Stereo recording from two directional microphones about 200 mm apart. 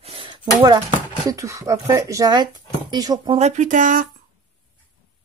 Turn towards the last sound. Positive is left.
turn(degrees=-40)  # may be behind; listen again after turning